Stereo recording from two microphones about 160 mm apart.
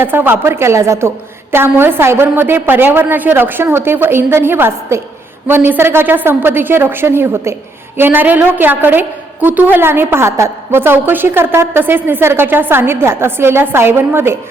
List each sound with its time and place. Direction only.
0.0 s a woman's voice: 15° right (ahead or behind)